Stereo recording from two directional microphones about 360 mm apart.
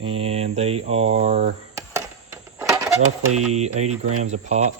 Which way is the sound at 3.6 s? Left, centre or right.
Centre.